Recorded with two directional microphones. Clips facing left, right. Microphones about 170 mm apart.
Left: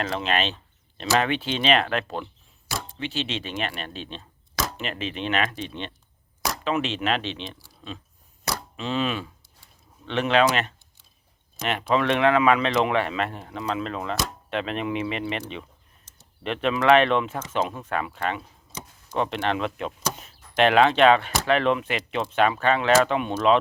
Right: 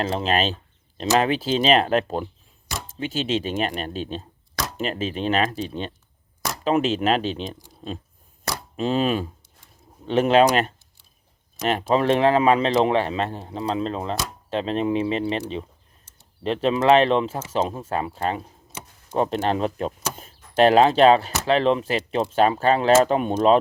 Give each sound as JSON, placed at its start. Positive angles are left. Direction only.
{"t": 0.0, "sound": "speech", "side_deg": -35}
{"t": 8.7, "sound": "a sound", "side_deg": -40}
{"t": 10.1, "sound": "speech", "side_deg": -40}